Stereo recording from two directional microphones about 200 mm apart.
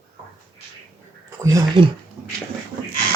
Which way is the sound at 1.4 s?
15° right (ahead or behind).